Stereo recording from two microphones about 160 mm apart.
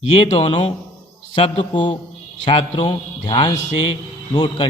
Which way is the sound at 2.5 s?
35° left (ahead or behind).